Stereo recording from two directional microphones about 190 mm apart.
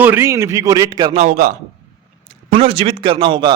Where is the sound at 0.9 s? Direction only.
30° right (ahead or behind).